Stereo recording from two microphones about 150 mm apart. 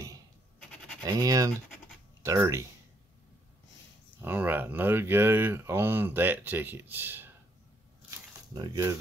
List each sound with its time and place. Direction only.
0.6 s sheep: 5° left (ahead or behind)
1.0 s speech: 25° right (ahead or behind)
4.2 s speech: 10° right (ahead or behind)
8.5 s speech: 25° right (ahead or behind)